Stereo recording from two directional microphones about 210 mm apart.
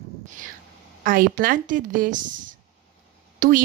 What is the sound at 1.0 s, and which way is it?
A woman's voice, 40° right (ahead or behind).